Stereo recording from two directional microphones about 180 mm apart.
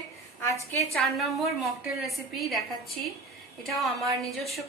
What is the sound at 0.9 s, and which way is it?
A woman's voice, centre (ahead or behind).